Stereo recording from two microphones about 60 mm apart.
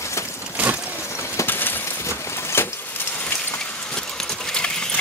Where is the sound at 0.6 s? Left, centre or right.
Right.